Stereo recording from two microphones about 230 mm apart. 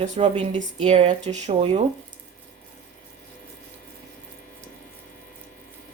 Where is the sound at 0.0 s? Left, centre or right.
Right.